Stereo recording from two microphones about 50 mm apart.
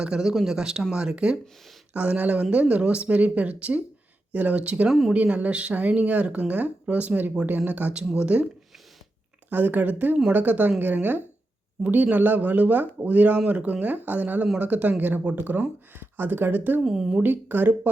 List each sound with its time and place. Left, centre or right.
0.0 s speech: centre
1.9 s speech: right
4.9 s speech: centre
5.1 s speech: right
7.9 s speech: centre
9.5 s speech: right
16.0 s speech: right
16.8 s speech: centre
17.2 s speech: right